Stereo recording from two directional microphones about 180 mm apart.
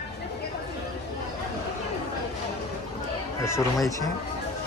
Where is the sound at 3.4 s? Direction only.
15° left (ahead or behind).